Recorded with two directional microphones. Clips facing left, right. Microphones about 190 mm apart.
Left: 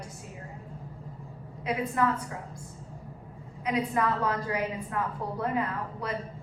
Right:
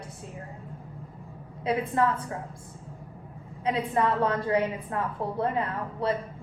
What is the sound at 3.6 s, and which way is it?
A woman's voice, 30° right (ahead or behind).